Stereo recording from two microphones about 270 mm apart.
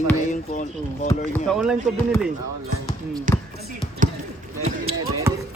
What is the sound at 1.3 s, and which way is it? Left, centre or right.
Speech, centre.